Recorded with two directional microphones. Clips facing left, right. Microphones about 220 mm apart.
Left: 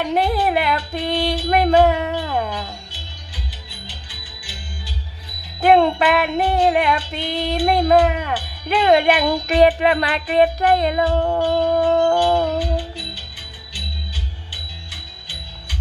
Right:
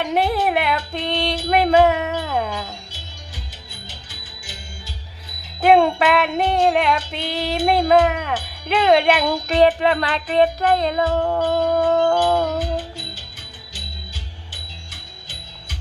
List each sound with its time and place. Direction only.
0.1 s music: centre (ahead or behind)
3.8 s music: 45° right (ahead or behind)
5.5 s music: centre (ahead or behind)
9.3 s music: 15° left (ahead or behind)
12.5 s music: 45° right (ahead or behind)